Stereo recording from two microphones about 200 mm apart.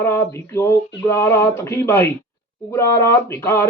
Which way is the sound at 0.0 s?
10° left (ahead or behind).